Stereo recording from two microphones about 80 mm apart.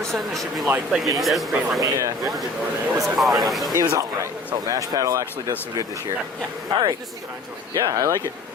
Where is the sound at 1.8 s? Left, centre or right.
Right.